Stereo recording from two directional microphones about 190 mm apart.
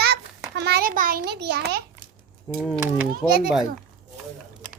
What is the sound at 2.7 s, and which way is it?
Speech, 10° right (ahead or behind).